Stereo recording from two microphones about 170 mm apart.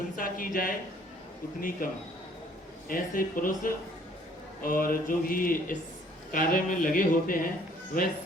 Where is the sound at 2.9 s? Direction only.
55° left (ahead or behind).